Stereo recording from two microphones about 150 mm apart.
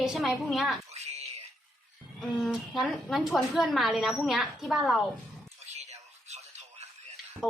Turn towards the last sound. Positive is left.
turn(degrees=0)  # may be behind; listen again after turning